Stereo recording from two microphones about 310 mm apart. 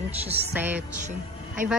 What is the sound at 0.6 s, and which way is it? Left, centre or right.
Music, centre.